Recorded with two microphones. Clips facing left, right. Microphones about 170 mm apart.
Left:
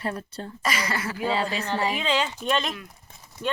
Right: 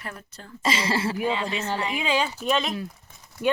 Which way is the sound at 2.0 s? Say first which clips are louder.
Right 1 dB; 10° right (ahead or behind).